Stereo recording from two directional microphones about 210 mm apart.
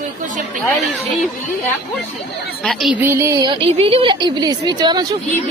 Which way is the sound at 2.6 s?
Centre (ahead or behind).